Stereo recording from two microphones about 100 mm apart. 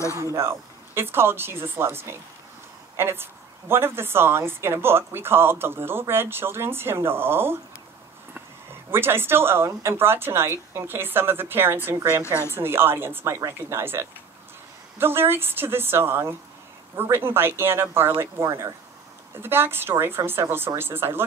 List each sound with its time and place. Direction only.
0.1 s a woman's voice: 30° right (ahead or behind)
8.9 s a woman's voice: 25° right (ahead or behind)